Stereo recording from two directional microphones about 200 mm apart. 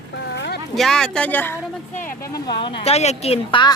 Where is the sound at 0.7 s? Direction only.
Centre (ahead or behind).